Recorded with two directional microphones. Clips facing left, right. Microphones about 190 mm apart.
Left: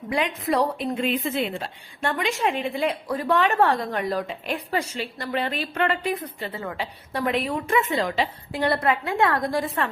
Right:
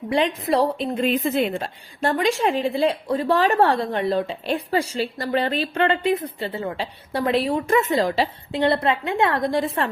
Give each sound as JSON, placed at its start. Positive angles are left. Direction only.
{"t": 0.1, "sound": "a woman's voice", "side_deg": -30}
{"t": 8.5, "sound": "a woman's voice", "side_deg": -25}